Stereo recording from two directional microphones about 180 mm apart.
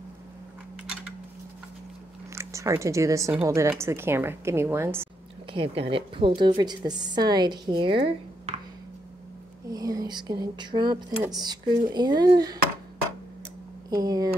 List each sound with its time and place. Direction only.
2.3 s a woman's voice: 15° right (ahead or behind)
5.5 s a woman's voice: 30° right (ahead or behind)
9.7 s a woman's voice: 20° right (ahead or behind)
13.8 s speech: 20° right (ahead or behind)